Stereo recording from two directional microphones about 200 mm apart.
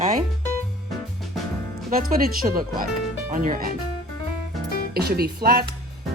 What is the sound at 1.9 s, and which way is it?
Speech, 45° right (ahead or behind).